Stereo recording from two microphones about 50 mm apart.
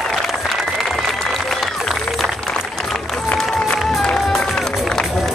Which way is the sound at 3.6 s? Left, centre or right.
Centre.